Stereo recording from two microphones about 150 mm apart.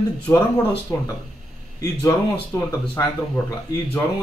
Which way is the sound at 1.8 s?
20° left (ahead or behind).